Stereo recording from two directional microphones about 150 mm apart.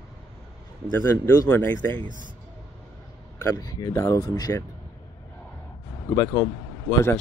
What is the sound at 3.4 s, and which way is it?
Speech, 25° left (ahead or behind).